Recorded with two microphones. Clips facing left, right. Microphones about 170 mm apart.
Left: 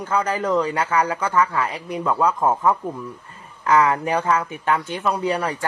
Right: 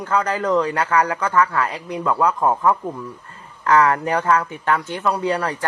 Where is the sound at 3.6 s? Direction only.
15° left (ahead or behind).